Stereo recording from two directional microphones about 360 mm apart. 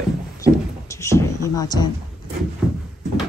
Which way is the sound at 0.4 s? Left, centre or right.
Centre.